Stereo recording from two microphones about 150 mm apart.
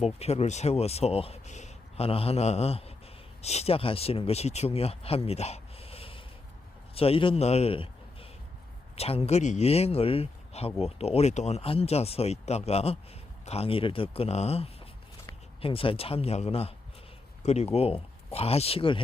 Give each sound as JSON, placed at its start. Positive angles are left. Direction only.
{"t": 0.0, "sound": "a man's voice", "side_deg": 45}